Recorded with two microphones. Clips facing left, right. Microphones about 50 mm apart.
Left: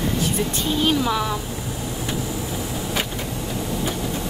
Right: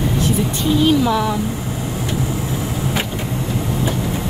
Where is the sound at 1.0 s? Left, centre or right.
Right.